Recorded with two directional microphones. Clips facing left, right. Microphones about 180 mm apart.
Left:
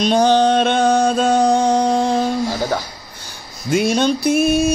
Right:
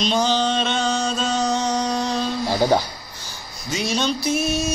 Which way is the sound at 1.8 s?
55° left (ahead or behind).